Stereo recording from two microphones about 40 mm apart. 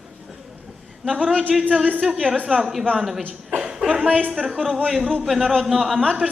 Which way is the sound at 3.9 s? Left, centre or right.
Right.